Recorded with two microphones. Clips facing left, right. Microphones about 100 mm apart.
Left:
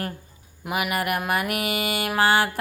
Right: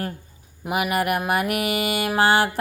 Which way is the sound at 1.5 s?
35° left (ahead or behind).